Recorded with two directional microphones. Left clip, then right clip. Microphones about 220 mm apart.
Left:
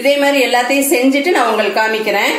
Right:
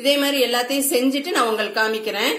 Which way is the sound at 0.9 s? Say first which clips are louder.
Left 8 dB; 40° right (ahead or behind).